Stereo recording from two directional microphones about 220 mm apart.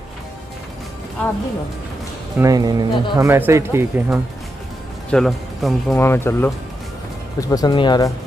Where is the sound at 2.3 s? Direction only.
15° right (ahead or behind).